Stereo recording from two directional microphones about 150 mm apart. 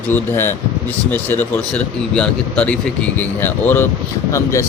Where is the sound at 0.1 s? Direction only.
15° left (ahead or behind).